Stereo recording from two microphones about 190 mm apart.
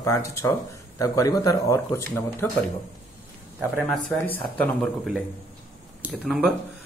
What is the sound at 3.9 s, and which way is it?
Speech, 5° left (ahead or behind).